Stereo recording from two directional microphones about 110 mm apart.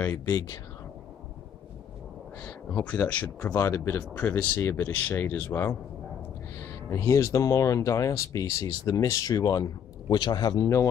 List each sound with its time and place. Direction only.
0.2 s speech: 30° left (ahead or behind)
2.4 s speech: 10° left (ahead or behind)
6.9 s speech: 25° left (ahead or behind)